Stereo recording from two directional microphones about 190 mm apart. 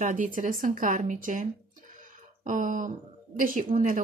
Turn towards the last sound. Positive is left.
turn(degrees=-45)  # may be behind; listen again after turning